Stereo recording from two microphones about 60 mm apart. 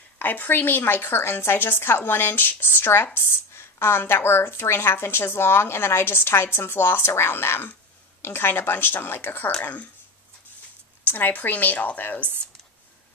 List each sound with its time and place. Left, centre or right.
0.2 s a woman's voice: left
9.6 s a woman's voice: left
11.1 s a woman's voice: left